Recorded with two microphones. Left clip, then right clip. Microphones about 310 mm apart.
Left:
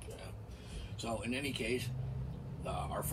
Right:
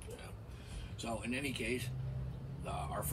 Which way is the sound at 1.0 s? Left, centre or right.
Centre.